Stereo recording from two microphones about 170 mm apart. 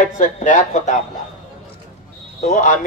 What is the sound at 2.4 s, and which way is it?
Speech, 50° left (ahead or behind).